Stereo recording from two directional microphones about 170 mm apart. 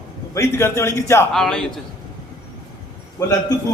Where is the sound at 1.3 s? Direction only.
Centre (ahead or behind).